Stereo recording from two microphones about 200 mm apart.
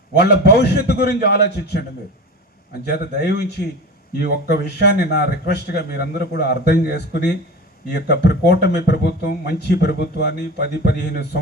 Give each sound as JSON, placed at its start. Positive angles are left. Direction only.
{"t": 0.2, "sound": "a man's voice", "side_deg": 55}
{"t": 2.9, "sound": "speech", "side_deg": 55}